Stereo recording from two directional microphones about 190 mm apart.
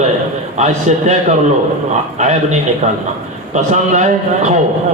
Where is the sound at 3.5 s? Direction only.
40° right (ahead or behind).